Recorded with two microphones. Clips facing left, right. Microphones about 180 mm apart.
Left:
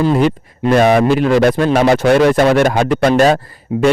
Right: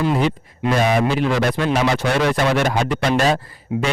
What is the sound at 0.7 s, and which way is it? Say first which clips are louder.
A man's voice: left 7 dB; 65° left (ahead or behind).